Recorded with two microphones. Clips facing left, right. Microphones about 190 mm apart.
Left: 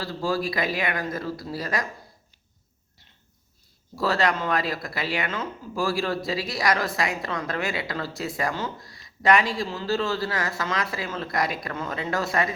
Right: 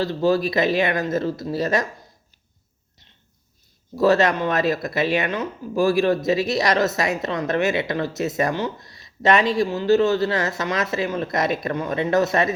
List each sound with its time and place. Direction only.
0.0 s speech: 20° right (ahead or behind)
3.9 s speech: 20° right (ahead or behind)